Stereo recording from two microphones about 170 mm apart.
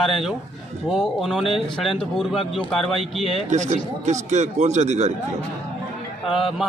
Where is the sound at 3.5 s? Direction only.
45° right (ahead or behind).